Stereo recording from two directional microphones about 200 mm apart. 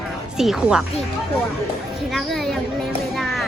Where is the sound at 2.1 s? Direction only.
Centre (ahead or behind).